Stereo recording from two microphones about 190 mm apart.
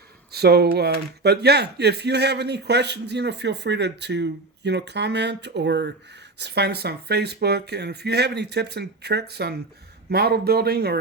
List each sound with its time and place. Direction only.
0.3 s speech: 55° right (ahead or behind)